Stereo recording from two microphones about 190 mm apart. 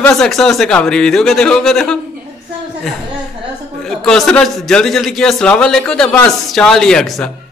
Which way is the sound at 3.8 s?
5° left (ahead or behind).